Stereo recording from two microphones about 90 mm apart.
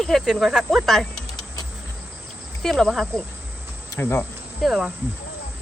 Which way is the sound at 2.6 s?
5° left (ahead or behind).